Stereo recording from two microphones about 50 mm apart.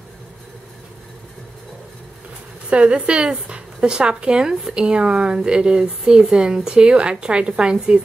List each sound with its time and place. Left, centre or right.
2.7 s a woman's voice: right